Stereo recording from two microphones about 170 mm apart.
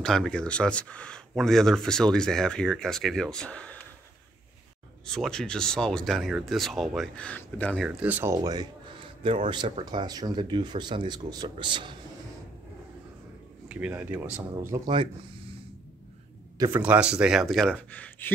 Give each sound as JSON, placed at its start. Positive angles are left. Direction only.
{"t": 0.0, "sound": "speech", "side_deg": 5}
{"t": 5.0, "sound": "speech", "side_deg": 5}
{"t": 7.8, "sound": "speech", "side_deg": -5}
{"t": 13.7, "sound": "speech", "side_deg": -10}
{"t": 14.7, "sound": "speech", "side_deg": -20}
{"t": 16.7, "sound": "speech", "side_deg": -10}